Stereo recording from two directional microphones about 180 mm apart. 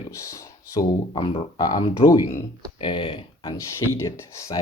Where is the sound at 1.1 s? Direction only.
30° left (ahead or behind).